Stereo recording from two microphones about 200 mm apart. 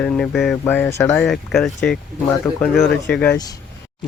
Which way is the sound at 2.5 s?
15° left (ahead or behind).